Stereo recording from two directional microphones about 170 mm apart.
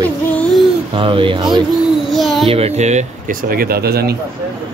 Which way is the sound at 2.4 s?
35° right (ahead or behind).